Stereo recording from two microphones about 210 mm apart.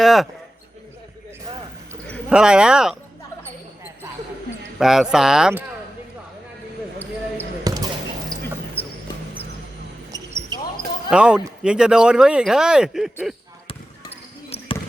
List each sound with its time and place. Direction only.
0.0 s speech: centre (ahead or behind)
2.3 s speech: 5° right (ahead or behind)
4.8 s speech: centre (ahead or behind)
7.6 s basketball bounce: 20° right (ahead or behind)
8.8 s music: 10° left (ahead or behind)
10.1 s basketball bounce: 15° right (ahead or behind)
11.1 s speech: 5° right (ahead or behind)
13.7 s basketball bounce: 30° left (ahead or behind)